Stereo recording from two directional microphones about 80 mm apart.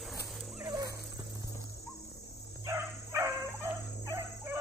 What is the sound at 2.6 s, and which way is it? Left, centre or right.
Dog, right.